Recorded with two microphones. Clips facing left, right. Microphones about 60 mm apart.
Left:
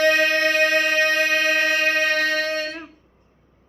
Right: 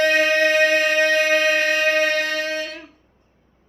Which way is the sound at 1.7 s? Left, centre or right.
Left.